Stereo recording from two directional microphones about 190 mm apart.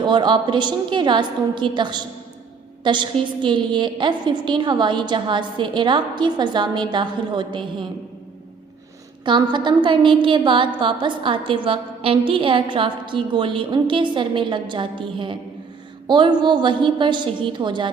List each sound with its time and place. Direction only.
0.0 s a woman's voice: 25° right (ahead or behind)
9.2 s a woman's voice: 25° right (ahead or behind)